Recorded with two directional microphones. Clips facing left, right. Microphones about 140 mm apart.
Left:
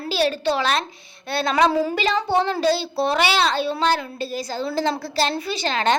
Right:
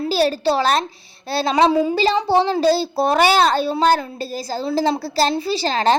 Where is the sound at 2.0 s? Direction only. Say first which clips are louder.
Right 4 dB; 35° right (ahead or behind).